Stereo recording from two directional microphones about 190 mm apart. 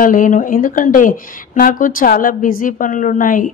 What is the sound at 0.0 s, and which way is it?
A woman's voice, 45° left (ahead or behind).